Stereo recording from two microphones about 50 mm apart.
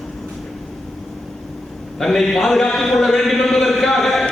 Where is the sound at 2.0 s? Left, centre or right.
Centre.